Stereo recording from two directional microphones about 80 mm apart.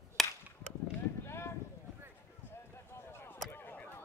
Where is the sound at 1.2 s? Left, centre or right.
Left.